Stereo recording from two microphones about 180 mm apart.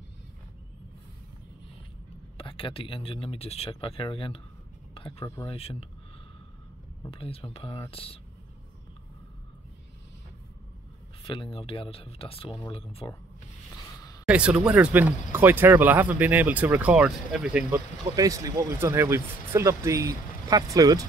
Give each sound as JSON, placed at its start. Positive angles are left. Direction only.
{"t": 2.3, "sound": "speech", "side_deg": 30}
{"t": 5.2, "sound": "speech", "side_deg": 15}
{"t": 5.5, "sound": "speech", "side_deg": 35}
{"t": 7.1, "sound": "speech", "side_deg": 30}
{"t": 11.2, "sound": "speech", "side_deg": 30}
{"t": 14.2, "sound": "speech", "side_deg": -5}
{"t": 18.1, "sound": "speech", "side_deg": -20}